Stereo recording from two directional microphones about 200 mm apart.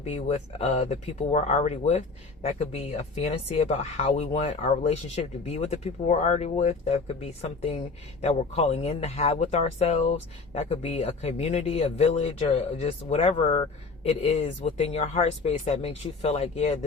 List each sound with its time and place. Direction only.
0.0 s speech: 35° left (ahead or behind)